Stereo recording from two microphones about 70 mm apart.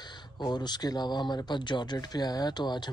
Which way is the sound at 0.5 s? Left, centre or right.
Left.